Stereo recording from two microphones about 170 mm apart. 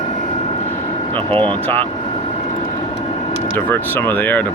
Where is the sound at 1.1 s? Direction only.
30° right (ahead or behind).